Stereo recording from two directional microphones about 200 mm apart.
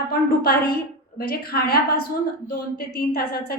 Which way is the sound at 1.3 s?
50° left (ahead or behind).